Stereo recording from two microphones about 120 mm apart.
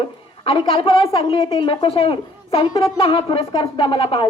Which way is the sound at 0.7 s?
50° left (ahead or behind).